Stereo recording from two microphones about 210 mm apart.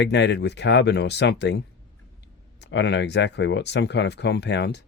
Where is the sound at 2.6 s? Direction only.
55° left (ahead or behind).